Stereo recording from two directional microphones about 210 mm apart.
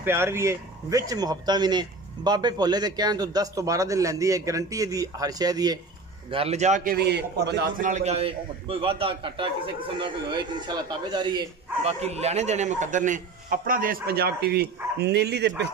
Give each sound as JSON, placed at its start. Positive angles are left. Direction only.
{"t": 0.0, "sound": "speech", "side_deg": -10}
{"t": 6.3, "sound": "a man's voice", "side_deg": -30}
{"t": 7.8, "sound": "a man's voice", "side_deg": -35}